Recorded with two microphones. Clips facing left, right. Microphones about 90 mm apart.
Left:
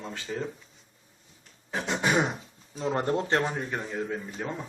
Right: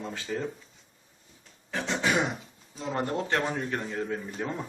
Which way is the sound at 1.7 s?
20° left (ahead or behind).